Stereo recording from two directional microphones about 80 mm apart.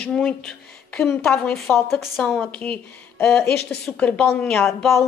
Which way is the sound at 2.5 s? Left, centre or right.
Centre.